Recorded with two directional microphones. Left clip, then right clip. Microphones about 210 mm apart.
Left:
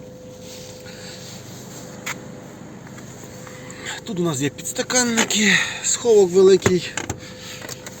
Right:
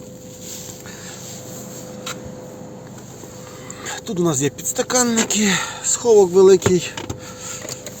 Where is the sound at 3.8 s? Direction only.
20° right (ahead or behind).